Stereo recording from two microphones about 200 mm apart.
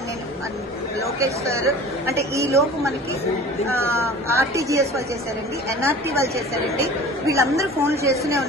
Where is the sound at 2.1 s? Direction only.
15° right (ahead or behind).